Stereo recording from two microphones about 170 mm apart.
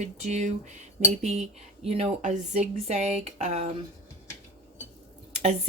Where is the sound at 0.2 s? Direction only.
40° right (ahead or behind).